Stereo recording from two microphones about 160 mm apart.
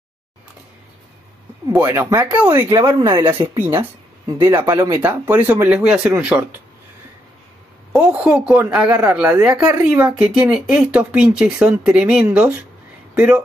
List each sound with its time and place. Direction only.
1.7 s speech: 10° right (ahead or behind)
7.9 s speech: 10° right (ahead or behind)